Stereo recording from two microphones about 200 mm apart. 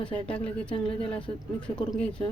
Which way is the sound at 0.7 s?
25° left (ahead or behind).